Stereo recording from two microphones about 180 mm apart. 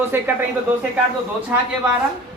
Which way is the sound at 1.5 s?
10° right (ahead or behind).